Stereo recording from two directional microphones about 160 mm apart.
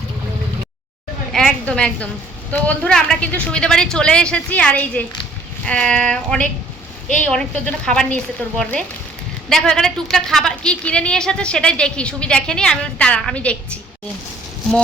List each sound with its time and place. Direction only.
1.3 s a woman's voice: 5° left (ahead or behind)